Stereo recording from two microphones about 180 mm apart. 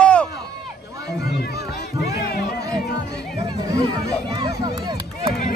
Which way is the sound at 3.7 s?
20° right (ahead or behind).